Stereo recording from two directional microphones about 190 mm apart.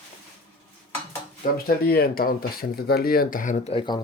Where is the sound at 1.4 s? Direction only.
50° left (ahead or behind).